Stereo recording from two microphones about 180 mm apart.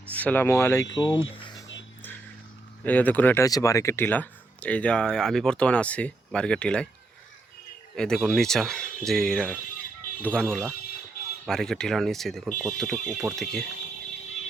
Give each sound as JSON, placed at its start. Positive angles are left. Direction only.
{"t": 0.1, "sound": "speech", "side_deg": 10}
{"t": 2.8, "sound": "speech", "side_deg": 10}
{"t": 7.9, "sound": "speech", "side_deg": 5}